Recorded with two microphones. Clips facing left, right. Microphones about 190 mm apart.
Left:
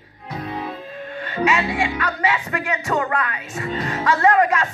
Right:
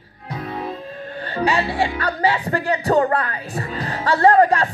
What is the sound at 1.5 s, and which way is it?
Speech, 35° right (ahead or behind).